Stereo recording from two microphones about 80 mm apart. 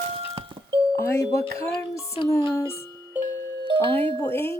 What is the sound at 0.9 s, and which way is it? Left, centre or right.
Speech, left.